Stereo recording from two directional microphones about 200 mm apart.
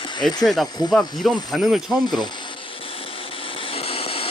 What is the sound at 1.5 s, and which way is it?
Speech, centre (ahead or behind).